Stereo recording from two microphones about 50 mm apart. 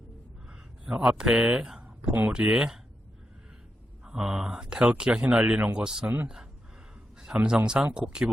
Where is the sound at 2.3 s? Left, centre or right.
Right.